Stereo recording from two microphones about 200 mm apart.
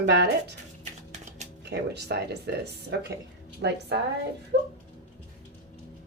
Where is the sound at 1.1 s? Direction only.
35° right (ahead or behind).